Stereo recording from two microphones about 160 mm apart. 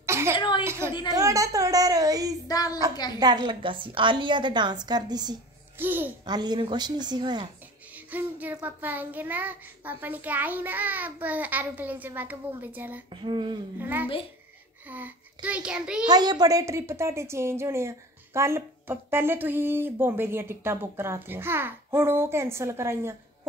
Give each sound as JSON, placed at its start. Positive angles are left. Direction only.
{"t": 0.0, "sound": "a sound", "side_deg": -15}
{"t": 0.4, "sound": "a sound", "side_deg": 30}
{"t": 0.7, "sound": "a woman's voice", "side_deg": -15}
{"t": 2.4, "sound": "a woman's voice", "side_deg": 25}
{"t": 3.2, "sound": "a woman's voice", "side_deg": -25}
{"t": 5.8, "sound": "a woman's voice", "side_deg": -10}
{"t": 6.2, "sound": "a woman's voice", "side_deg": -25}
{"t": 7.9, "sound": "a woman's voice", "side_deg": -10}
{"t": 13.1, "sound": "a woman's voice", "side_deg": -30}
{"t": 13.7, "sound": "a woman's voice", "side_deg": -10}
{"t": 16.1, "sound": "a woman's voice", "side_deg": -25}